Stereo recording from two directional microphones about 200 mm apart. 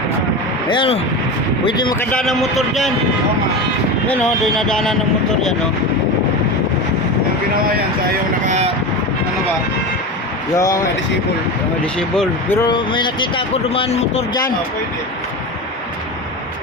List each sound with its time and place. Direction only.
0.7 s speech: 25° left (ahead or behind)
2.0 s speech: 5° left (ahead or behind)
4.1 s speech: 5° left (ahead or behind)
8.4 s vehicle: 35° right (ahead or behind)
10.6 s speech: 15° left (ahead or behind)
11.9 s speech: 5° left (ahead or behind)
12.6 s speech: 25° left (ahead or behind)